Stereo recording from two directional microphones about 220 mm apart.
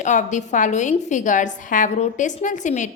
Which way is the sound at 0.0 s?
35° left (ahead or behind).